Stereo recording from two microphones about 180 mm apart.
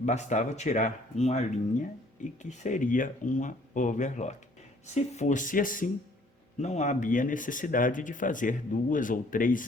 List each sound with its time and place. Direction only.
0.0 s speech: 40° left (ahead or behind)